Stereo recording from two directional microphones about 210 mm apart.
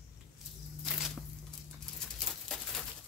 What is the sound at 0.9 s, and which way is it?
Tearing, centre (ahead or behind).